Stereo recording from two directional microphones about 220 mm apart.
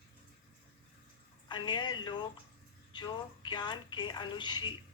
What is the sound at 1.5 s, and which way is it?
A woman's voice, 20° left (ahead or behind).